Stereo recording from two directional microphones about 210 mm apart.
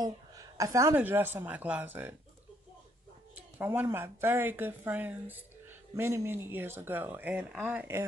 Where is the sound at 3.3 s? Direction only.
10° right (ahead or behind).